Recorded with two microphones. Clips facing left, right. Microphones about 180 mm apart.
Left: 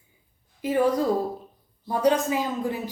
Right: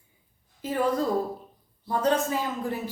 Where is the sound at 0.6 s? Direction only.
15° left (ahead or behind).